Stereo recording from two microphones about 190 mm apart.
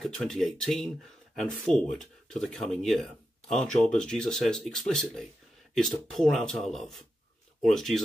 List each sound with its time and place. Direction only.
0.0 s speech: centre (ahead or behind)